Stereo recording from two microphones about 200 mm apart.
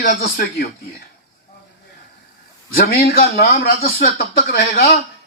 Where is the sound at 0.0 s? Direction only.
45° left (ahead or behind).